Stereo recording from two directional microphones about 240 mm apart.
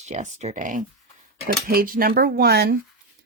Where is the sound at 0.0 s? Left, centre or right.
Right.